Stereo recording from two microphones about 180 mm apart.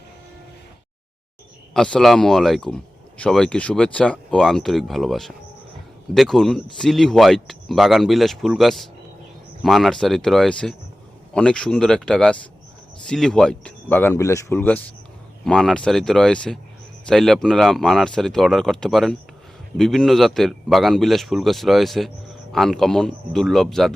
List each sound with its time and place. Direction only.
1.7 s a man's voice: 5° left (ahead or behind)